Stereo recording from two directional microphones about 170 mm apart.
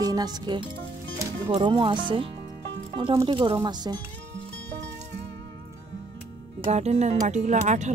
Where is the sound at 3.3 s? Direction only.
30° right (ahead or behind).